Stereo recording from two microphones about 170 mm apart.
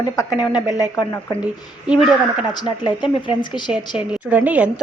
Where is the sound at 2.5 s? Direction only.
25° left (ahead or behind).